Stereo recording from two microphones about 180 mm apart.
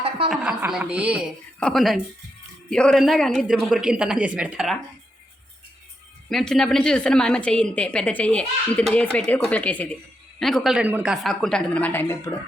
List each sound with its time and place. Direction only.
0.3 s a woman's voice: 5° right (ahead or behind)
6.2 s a woman's voice: centre (ahead or behind)